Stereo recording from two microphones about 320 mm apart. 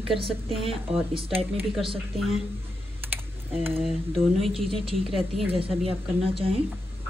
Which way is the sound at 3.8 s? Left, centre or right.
Centre.